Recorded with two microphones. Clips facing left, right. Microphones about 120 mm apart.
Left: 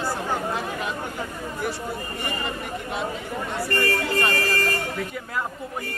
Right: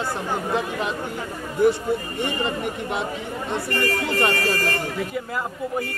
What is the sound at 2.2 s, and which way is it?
Speech, 20° right (ahead or behind).